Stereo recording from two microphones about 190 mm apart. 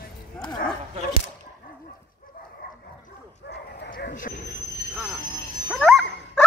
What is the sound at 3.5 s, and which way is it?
Bow-wow, 60° left (ahead or behind).